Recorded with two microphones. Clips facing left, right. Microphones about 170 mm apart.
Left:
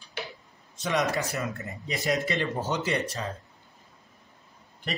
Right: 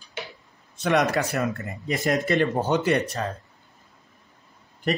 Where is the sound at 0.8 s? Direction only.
65° right (ahead or behind).